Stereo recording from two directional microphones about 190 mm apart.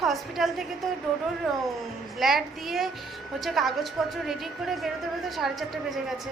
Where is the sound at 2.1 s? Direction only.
Centre (ahead or behind).